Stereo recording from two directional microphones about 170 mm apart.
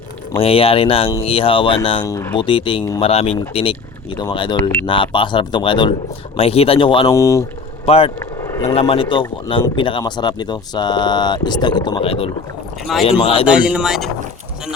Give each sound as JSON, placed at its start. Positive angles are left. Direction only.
{"t": 0.3, "sound": "speech", "side_deg": 35}
{"t": 2.0, "sound": "a man's voice", "side_deg": 20}
{"t": 2.4, "sound": "a man's voice", "side_deg": 30}
{"t": 7.1, "sound": "speech", "side_deg": 20}
{"t": 7.9, "sound": "speech", "side_deg": 35}
{"t": 8.4, "sound": "a sound", "side_deg": 20}
{"t": 8.7, "sound": "a man's voice", "side_deg": 35}
{"t": 12.8, "sound": "speech", "side_deg": 0}
{"t": 13.2, "sound": "speech", "side_deg": 35}
{"t": 13.5, "sound": "speech", "side_deg": -5}